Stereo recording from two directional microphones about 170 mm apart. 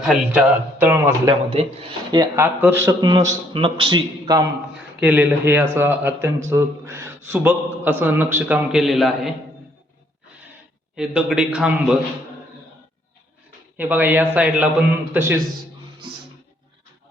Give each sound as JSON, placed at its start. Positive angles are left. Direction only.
{"t": 0.0, "sound": "a man's voice", "side_deg": -5}
{"t": 4.9, "sound": "speech", "side_deg": -10}
{"t": 10.9, "sound": "a man's voice", "side_deg": -5}
{"t": 13.7, "sound": "speech", "side_deg": -10}